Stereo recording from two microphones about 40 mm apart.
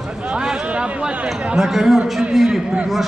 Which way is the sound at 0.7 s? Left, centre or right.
Right.